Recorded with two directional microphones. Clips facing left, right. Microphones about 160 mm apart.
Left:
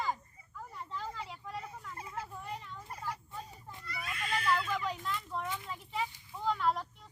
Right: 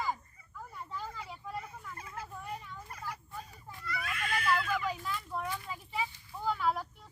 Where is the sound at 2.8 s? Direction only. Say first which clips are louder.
Left 5 dB; 25° left (ahead or behind).